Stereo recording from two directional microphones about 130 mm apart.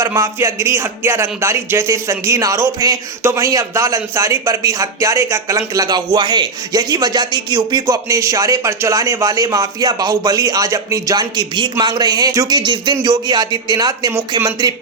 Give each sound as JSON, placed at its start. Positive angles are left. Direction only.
{"t": 0.0, "sound": "speech", "side_deg": -20}